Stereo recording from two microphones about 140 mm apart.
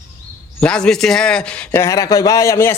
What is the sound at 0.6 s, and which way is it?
A man's voice, 5° left (ahead or behind).